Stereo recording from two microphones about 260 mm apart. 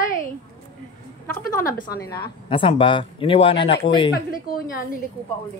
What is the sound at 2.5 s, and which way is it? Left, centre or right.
Speech, centre.